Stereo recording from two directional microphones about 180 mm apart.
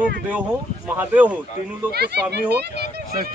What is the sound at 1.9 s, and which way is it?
Speech, 65° right (ahead or behind).